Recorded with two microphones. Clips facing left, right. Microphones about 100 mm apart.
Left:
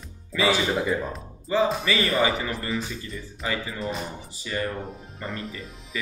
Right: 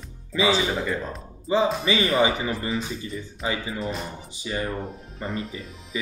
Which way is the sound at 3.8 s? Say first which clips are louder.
Even; centre (ahead or behind).